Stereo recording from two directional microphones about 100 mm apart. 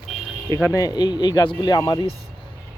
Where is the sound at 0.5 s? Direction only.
30° left (ahead or behind).